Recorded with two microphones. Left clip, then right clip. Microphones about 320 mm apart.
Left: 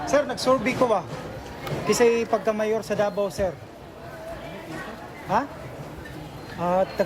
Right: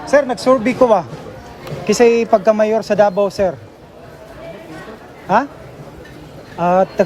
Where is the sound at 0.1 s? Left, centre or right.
Centre.